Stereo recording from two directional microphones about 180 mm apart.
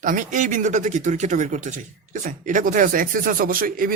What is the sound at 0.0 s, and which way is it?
A man's voice, 45° right (ahead or behind).